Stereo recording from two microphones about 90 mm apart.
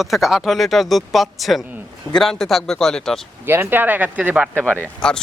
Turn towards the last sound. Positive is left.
turn(degrees=10)  # may be behind; listen again after turning